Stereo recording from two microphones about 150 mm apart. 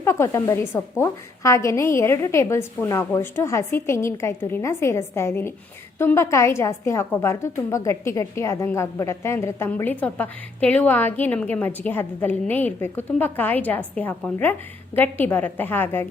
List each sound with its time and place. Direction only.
0.0 s a woman's voice: 15° left (ahead or behind)